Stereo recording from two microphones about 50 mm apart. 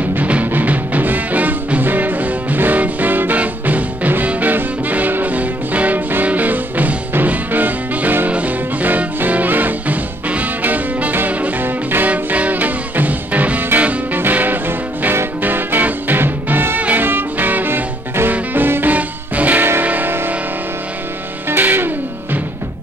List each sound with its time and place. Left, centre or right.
0.1 s music: right
12.1 s music: right
21.5 s music: right